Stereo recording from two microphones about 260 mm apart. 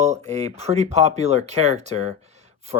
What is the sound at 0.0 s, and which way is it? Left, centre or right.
Speech, right.